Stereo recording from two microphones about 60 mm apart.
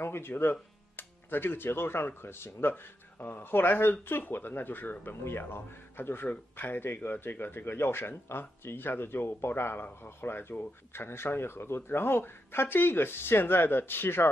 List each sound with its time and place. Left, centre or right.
0.0 s speech: left
6.2 s speech: left